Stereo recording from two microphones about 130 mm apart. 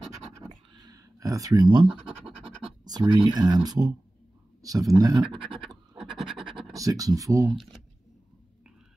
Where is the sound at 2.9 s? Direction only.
35° right (ahead or behind).